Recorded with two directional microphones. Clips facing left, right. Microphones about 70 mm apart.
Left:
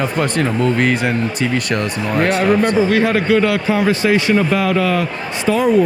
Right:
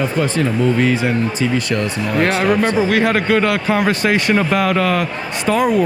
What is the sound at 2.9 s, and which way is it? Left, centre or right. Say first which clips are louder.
Speech: left 1 dB; right.